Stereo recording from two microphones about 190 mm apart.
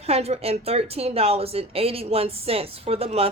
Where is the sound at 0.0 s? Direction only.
35° right (ahead or behind).